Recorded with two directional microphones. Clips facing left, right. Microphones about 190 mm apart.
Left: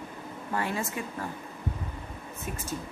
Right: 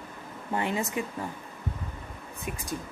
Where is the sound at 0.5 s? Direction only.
20° right (ahead or behind).